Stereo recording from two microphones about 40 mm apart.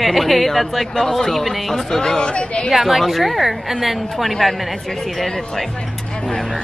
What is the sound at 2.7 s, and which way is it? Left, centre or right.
A woman's voice, centre.